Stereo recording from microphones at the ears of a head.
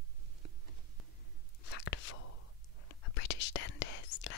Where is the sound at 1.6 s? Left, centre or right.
Left.